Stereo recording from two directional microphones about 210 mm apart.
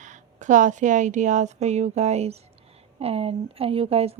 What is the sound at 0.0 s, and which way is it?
Speech, 35° right (ahead or behind).